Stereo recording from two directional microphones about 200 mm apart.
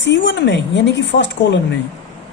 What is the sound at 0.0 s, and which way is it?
A woman's voice, 60° left (ahead or behind).